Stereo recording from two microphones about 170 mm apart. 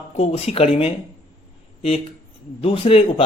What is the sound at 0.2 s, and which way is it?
Speech, 40° left (ahead or behind).